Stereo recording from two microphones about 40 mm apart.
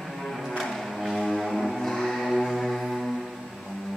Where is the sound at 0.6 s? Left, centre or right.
Centre.